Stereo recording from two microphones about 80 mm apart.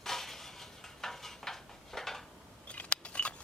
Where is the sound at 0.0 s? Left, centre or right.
Centre.